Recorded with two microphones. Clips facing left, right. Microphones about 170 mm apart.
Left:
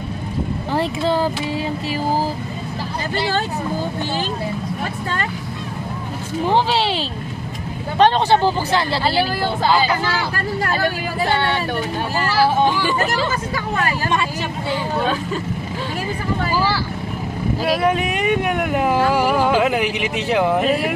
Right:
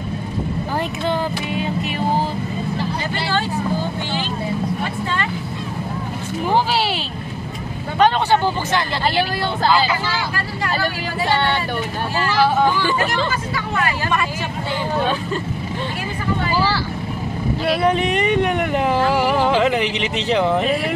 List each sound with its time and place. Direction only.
0.7 s speech: 35° left (ahead or behind)
8.0 s speech: 35° left (ahead or behind)
12.8 s speech: 5° left (ahead or behind)
17.8 s speech: 10° left (ahead or behind)